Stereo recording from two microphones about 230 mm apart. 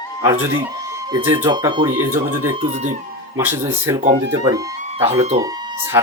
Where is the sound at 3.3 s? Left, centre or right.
Centre; by 5.4 s right.